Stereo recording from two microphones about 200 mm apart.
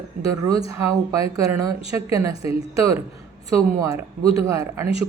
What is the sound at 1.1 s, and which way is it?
A man's voice, 15° right (ahead or behind).